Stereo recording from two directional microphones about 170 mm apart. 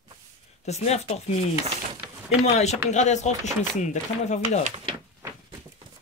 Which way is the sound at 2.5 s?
40° left (ahead or behind).